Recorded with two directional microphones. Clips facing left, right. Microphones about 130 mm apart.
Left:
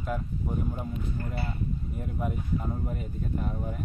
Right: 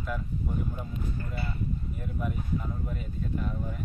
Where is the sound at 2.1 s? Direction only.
30° left (ahead or behind).